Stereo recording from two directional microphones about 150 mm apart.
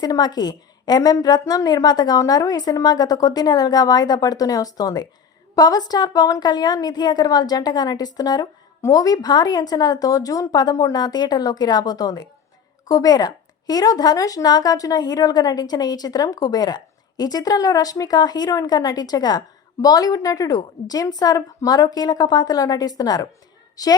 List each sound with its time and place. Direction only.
0.0 s a woman's voice: 25° left (ahead or behind)